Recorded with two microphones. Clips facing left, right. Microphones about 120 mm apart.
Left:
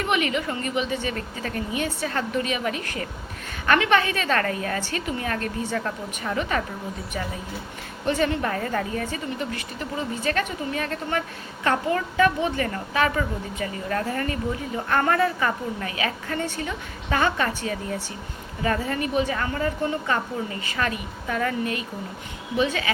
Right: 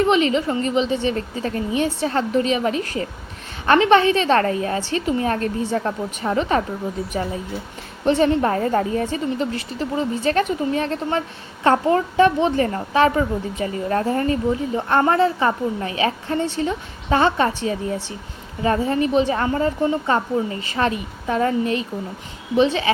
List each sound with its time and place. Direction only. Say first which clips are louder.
0.0 s a woman's voice: right 7 dB; 30° right (ahead or behind)
8.0 s a woman's voice: right 7 dB; 30° right (ahead or behind)